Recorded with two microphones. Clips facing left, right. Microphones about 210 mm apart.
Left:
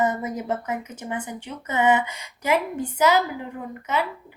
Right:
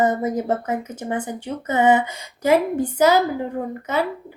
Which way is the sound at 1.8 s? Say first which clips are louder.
Right 3 dB; 30° right (ahead or behind).